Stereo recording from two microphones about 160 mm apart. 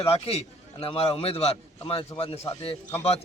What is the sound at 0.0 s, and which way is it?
A man's voice, 40° left (ahead or behind).